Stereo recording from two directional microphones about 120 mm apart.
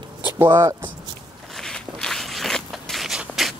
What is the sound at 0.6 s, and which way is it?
Speech, 25° right (ahead or behind).